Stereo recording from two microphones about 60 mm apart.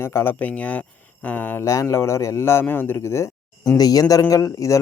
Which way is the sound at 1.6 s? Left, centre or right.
Left.